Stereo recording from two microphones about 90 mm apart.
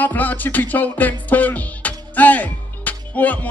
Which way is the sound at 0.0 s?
20° left (ahead or behind).